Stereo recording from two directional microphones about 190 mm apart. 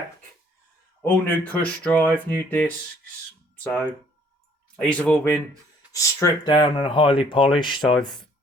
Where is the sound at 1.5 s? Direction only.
10° left (ahead or behind).